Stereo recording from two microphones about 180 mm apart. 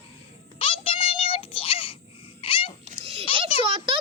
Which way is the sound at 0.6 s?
30° left (ahead or behind).